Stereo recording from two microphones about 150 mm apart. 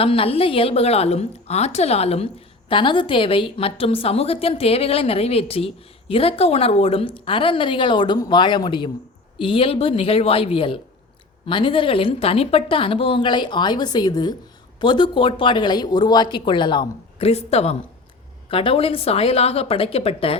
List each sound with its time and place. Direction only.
0.0 s a woman's voice: 40° left (ahead or behind)